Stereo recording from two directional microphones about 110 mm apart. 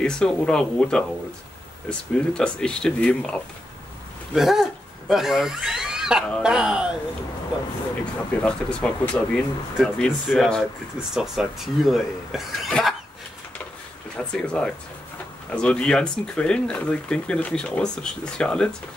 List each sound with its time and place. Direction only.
0.0 s speech: 5° left (ahead or behind)
4.3 s speech: centre (ahead or behind)
8.0 s speech: 10° left (ahead or behind)
14.1 s speech: 10° left (ahead or behind)